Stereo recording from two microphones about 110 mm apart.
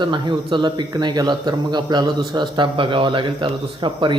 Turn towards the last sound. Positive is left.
turn(degrees=-50)  # may be behind; listen again after turning